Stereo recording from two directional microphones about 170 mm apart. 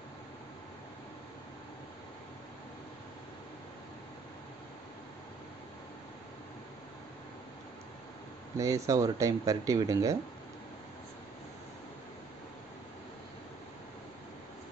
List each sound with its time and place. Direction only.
8.5 s speech: 20° right (ahead or behind)